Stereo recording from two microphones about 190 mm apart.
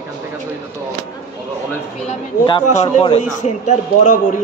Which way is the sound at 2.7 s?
30° left (ahead or behind).